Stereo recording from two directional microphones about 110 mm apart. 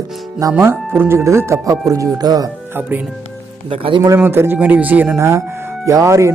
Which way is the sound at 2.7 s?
15° right (ahead or behind).